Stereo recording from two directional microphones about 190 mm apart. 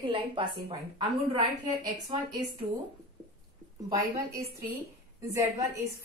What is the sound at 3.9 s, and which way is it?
A woman's voice, 15° right (ahead or behind).